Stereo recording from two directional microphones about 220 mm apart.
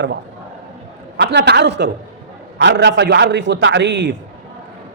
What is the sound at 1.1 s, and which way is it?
A man's voice, 50° right (ahead or behind).